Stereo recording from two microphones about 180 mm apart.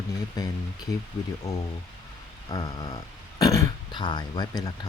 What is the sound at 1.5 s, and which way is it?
Speech, 20° left (ahead or behind).